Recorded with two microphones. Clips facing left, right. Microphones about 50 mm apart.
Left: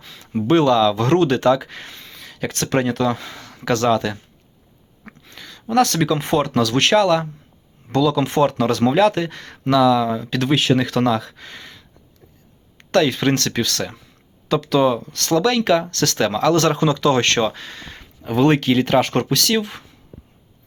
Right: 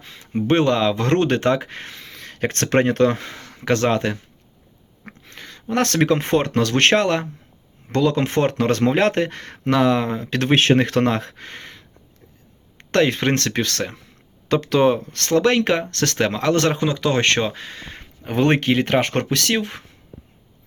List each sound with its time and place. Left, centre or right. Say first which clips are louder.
0.0 s a sound: even; right
0.4 s speech: left 3 dB; right
1.9 s speech: right 1 dB; right
3.4 s speech: left 1 dB; right
5.2 s speech: even; right; by 17.8 s centre
17.8 s speech: left 2 dB; right